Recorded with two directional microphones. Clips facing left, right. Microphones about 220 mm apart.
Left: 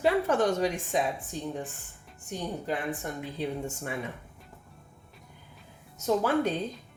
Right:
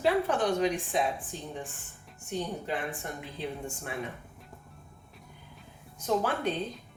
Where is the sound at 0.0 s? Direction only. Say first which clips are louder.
Left 2 dB; 45° left (ahead or behind).